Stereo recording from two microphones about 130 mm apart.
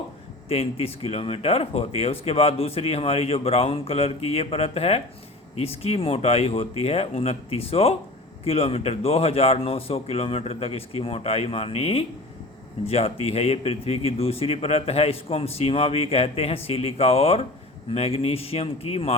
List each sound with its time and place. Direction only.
0.4 s speech: 50° left (ahead or behind)